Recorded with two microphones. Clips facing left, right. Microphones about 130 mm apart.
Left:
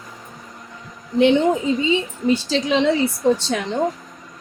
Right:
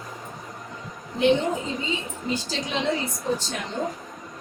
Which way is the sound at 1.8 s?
75° left (ahead or behind).